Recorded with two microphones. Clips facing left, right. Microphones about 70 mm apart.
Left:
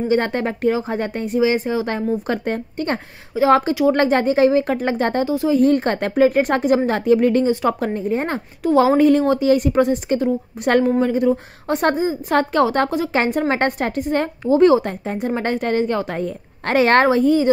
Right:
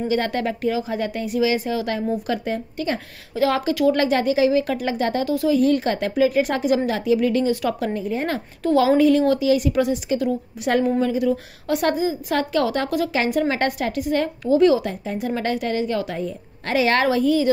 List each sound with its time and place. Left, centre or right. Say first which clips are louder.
0.1 s a woman's voice: left 4 dB; left
2.2 s a woman's voice: left 2 dB; left
3.3 s speech: left 3 dB; centre
3.9 s a woman's voice: left 3 dB; left
5.2 s a woman's voice: left 2 dB; left
7.4 s a woman's voice: left 3 dB; left
10.6 s a woman's voice: left 3 dB; left
17.1 s a woman's voice: left 3 dB; left